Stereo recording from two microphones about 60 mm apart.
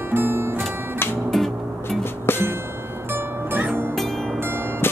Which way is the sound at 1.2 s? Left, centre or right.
Centre.